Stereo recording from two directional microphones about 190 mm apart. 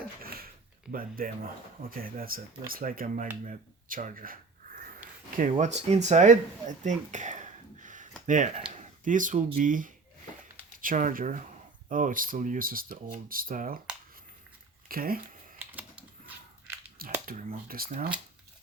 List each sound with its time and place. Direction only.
0.2 s a sound: 50° right (ahead or behind)
1.9 s speech: 50° right (ahead or behind)
5.0 s a sound: 10° right (ahead or behind)
5.4 s speech: 40° right (ahead or behind)
8.6 s a sound: 35° right (ahead or behind)
9.6 s speech: 45° right (ahead or behind)
14.8 s speech: 50° right (ahead or behind)
15.7 s typing: 10° right (ahead or behind)
17.0 s speech: 50° right (ahead or behind)